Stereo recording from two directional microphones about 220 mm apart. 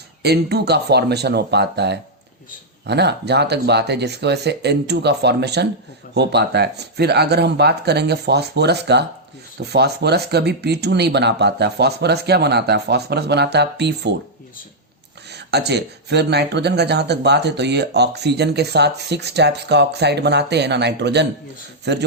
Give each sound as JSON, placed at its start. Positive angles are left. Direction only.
{"t": 0.2, "sound": "speech", "side_deg": -45}
{"t": 15.3, "sound": "speech", "side_deg": -50}